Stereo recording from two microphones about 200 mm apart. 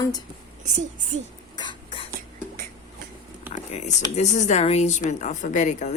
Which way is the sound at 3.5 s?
35° left (ahead or behind).